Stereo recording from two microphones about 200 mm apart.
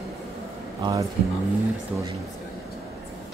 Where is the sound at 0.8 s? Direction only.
15° right (ahead or behind).